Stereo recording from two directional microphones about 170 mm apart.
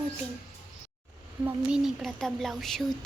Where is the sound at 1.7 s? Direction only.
5° right (ahead or behind).